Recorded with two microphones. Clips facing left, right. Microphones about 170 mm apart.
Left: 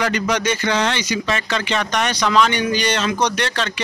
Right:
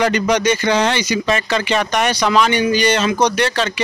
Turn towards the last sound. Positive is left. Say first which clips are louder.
# right 5 dB
turn(degrees=-5)  # may be behind; listen again after turning